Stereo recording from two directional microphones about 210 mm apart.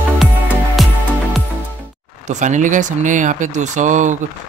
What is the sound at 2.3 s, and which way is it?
Speech, 35° right (ahead or behind).